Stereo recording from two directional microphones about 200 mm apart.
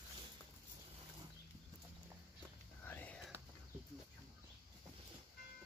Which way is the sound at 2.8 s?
10° left (ahead or behind).